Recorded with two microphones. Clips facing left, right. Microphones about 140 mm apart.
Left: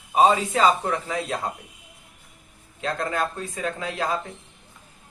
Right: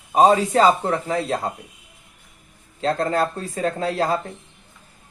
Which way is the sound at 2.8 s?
35° right (ahead or behind).